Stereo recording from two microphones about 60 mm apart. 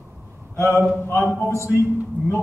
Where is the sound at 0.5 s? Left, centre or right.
Left.